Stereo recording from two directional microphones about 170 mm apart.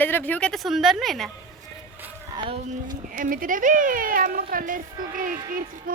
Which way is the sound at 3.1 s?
55° right (ahead or behind).